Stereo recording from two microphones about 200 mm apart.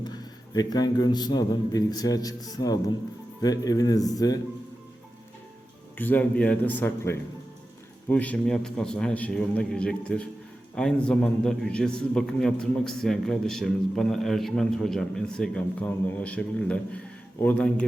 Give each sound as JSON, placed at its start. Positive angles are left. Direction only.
{"t": 0.0, "sound": "a man's voice", "side_deg": 20}
{"t": 6.0, "sound": "a man's voice", "side_deg": 10}